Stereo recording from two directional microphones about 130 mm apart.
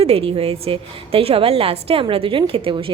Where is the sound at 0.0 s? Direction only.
50° right (ahead or behind).